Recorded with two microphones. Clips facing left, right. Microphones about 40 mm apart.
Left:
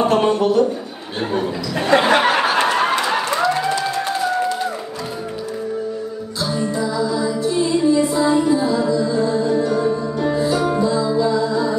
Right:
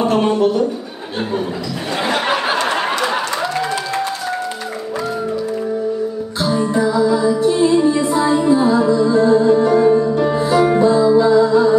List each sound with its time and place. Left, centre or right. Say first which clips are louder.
0.0 s a man's voice: right 1 dB; centre
2.0 s a sound: left 4 dB; left
6.4 s music: right 5 dB; right